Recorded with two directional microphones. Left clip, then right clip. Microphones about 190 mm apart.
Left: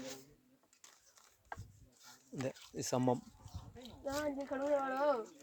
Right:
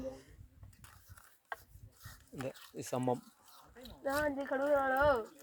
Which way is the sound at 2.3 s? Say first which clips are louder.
Left 1 dB; 30° left (ahead or behind).